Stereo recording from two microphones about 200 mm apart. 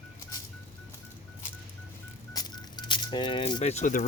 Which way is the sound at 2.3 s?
20° left (ahead or behind).